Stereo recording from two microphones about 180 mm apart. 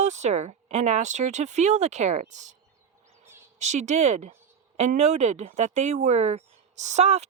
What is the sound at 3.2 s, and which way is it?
Bird, 15° right (ahead or behind).